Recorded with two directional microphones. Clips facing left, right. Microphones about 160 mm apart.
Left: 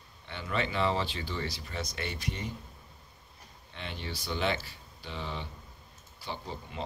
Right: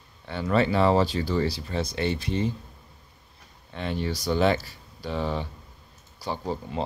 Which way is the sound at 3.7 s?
45° right (ahead or behind).